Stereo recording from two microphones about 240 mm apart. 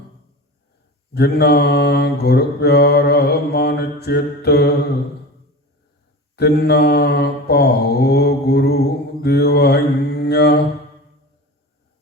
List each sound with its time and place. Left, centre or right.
1.1 s mantra: left
6.3 s mantra: left